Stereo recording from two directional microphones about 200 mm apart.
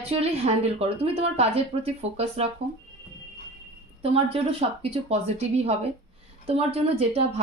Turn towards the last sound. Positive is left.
turn(degrees=-30)  # may be behind; listen again after turning